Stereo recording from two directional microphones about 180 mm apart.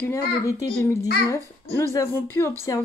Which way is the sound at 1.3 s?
15° left (ahead or behind).